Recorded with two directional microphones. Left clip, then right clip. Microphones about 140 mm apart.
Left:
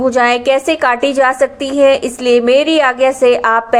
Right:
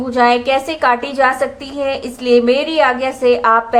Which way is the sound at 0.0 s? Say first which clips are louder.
Left 2 dB; 35° left (ahead or behind).